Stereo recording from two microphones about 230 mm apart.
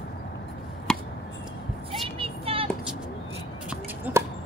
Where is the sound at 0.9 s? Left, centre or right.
Centre.